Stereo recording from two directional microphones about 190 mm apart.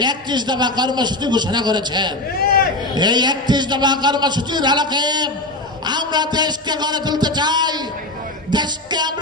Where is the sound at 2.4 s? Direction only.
55° left (ahead or behind).